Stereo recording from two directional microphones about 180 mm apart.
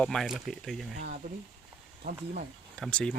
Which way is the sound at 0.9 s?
50° right (ahead or behind).